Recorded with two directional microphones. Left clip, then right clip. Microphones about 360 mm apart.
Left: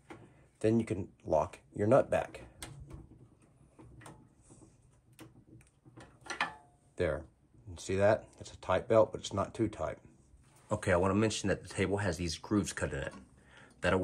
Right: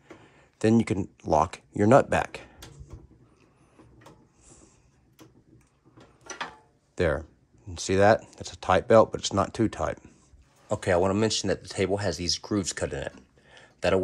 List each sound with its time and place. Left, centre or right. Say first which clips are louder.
0.6 s speech: right 7 dB; right
7.0 s speech: right 8 dB; right
10.7 s speech: right 6 dB; centre